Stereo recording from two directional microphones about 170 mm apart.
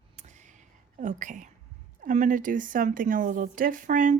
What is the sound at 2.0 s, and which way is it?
A woman's voice, 50° right (ahead or behind).